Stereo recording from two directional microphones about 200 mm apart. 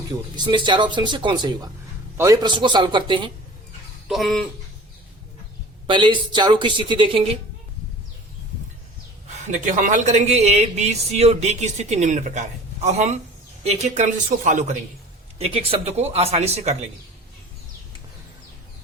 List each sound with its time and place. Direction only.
0.1 s speech: 20° right (ahead or behind)
4.1 s a sound: centre (ahead or behind)
5.9 s speech: 20° right (ahead or behind)
9.3 s a man's voice: 40° right (ahead or behind)
15.4 s a man's voice: 30° right (ahead or behind)